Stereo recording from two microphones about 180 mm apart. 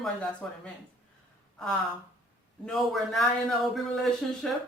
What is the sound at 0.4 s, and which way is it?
Speech, 5° left (ahead or behind).